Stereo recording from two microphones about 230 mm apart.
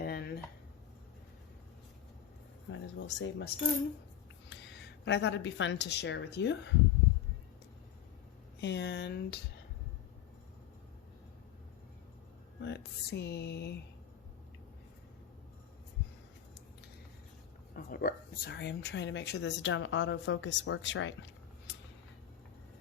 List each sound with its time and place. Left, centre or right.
0.0 s a sound: left
2.6 s speech: left
5.0 s speech: left
8.6 s speech: left
12.6 s speech: left
17.7 s speech: left